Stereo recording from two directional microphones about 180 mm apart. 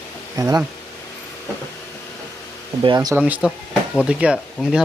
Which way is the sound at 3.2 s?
10° right (ahead or behind).